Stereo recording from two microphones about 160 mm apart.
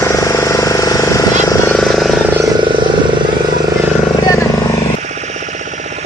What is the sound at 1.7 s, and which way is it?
Vehicle, centre (ahead or behind).